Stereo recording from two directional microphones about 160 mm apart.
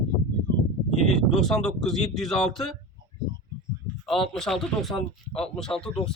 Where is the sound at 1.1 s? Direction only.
5° left (ahead or behind).